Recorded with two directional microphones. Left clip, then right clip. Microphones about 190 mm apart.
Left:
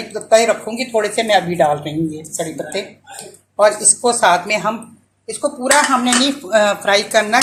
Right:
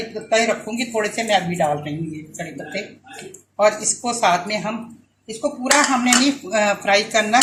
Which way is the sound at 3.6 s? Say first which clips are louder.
Left 4 dB; 25° left (ahead or behind).